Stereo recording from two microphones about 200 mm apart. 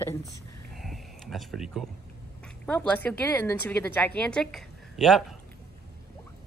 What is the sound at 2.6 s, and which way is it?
A woman's voice, 5° left (ahead or behind).